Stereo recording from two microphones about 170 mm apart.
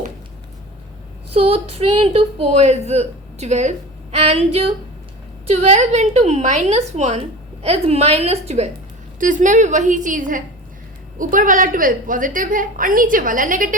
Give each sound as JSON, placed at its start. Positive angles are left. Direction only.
{"t": 1.3, "sound": "a woman's voice", "side_deg": -35}